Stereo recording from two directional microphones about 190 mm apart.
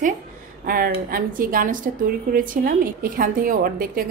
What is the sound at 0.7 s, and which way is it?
A woman's voice, 50° right (ahead or behind).